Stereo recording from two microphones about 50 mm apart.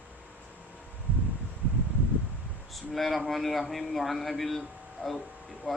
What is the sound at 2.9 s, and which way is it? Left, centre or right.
A man's voice, centre.